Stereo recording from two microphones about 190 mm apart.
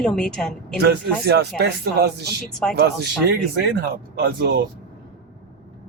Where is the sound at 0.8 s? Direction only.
60° right (ahead or behind).